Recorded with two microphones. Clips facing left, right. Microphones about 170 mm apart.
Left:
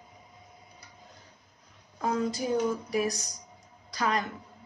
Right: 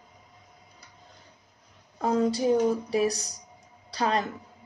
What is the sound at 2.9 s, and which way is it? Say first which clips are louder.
A woman's voice: right 4 dB; 35° right (ahead or behind).